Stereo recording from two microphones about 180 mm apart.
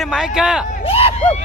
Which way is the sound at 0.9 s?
30° left (ahead or behind).